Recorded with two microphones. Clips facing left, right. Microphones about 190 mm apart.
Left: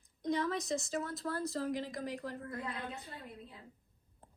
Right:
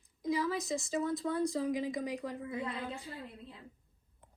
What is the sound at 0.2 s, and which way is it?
A woman's voice, centre (ahead or behind).